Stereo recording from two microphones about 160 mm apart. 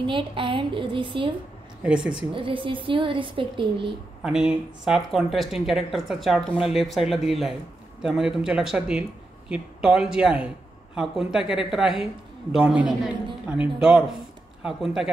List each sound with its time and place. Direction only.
0.0 s a woman's voice: 30° right (ahead or behind)
1.8 s speech: 5° right (ahead or behind)
2.3 s a woman's voice: 30° right (ahead or behind)
4.2 s speech: 5° right (ahead or behind)